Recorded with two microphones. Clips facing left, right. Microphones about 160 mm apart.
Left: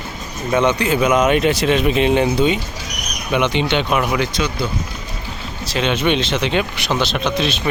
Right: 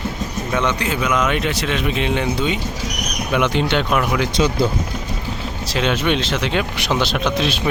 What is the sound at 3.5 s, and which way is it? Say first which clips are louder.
Speech: even; 5° right (ahead or behind).